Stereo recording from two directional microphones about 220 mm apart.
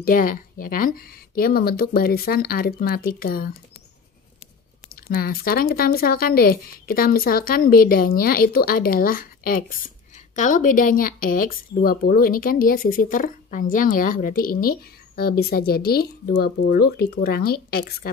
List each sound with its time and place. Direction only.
0.0 s speech: 40° left (ahead or behind)
4.9 s speech: 40° left (ahead or behind)